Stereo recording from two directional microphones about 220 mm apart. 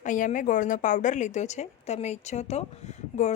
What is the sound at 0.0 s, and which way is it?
A woman's voice, 35° left (ahead or behind).